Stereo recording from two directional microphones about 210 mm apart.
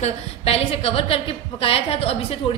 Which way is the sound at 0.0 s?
30° left (ahead or behind).